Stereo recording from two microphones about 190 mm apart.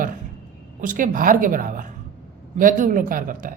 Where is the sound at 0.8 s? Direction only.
45° right (ahead or behind).